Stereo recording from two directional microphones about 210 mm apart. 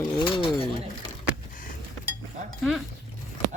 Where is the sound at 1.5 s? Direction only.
40° left (ahead or behind).